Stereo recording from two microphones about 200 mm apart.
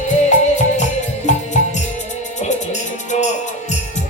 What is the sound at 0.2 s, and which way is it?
Music, 35° left (ahead or behind).